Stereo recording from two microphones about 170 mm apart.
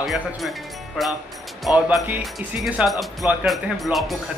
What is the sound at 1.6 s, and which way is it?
Speech, 5° right (ahead or behind).